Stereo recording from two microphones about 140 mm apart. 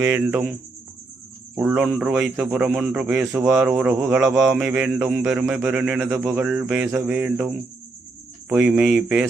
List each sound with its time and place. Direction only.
0.0 s a man's voice: 15° right (ahead or behind)
1.5 s a man's voice: 10° right (ahead or behind)